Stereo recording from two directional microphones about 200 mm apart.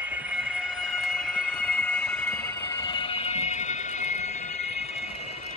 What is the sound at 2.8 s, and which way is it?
Fire alarm, 25° left (ahead or behind).